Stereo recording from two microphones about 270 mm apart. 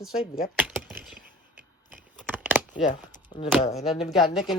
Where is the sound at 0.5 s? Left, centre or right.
Centre.